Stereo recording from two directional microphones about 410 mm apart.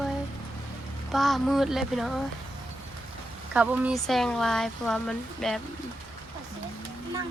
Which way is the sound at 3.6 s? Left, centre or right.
Centre.